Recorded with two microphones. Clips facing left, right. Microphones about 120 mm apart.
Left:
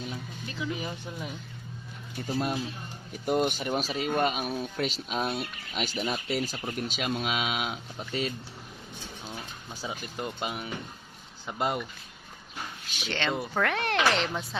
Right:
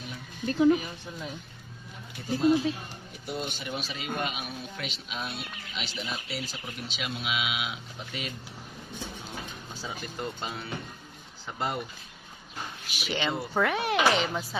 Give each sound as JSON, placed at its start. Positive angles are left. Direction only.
{"t": 0.4, "sound": "speech", "side_deg": -45}
{"t": 0.8, "sound": "speech", "side_deg": 15}
{"t": 3.2, "sound": "speech", "side_deg": 50}
{"t": 9.7, "sound": "speech", "side_deg": 15}
{"t": 12.9, "sound": "speech", "side_deg": -5}